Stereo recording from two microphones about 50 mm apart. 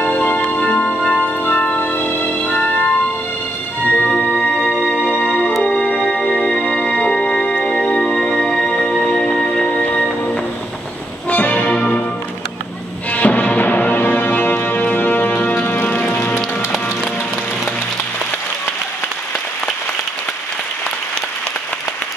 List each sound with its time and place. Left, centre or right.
0.0 s music: left
4.4 s music: centre
5.2 s music: centre
11.2 s music: left
13.1 s music: left
16.3 s music: centre